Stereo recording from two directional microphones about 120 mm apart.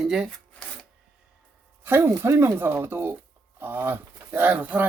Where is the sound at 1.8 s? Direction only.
20° right (ahead or behind).